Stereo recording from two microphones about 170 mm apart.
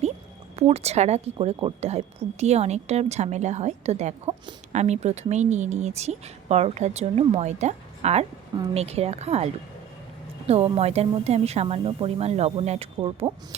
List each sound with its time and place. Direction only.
0.5 s speech: 40° right (ahead or behind)